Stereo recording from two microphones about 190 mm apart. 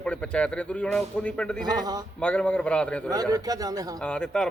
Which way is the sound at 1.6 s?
20° right (ahead or behind).